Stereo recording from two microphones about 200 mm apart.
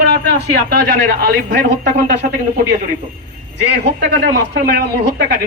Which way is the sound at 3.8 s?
60° right (ahead or behind).